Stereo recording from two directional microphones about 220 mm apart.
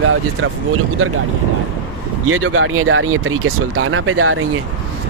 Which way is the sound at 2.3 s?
70° right (ahead or behind).